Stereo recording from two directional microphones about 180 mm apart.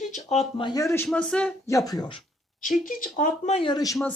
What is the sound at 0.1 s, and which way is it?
Speech, 35° left (ahead or behind).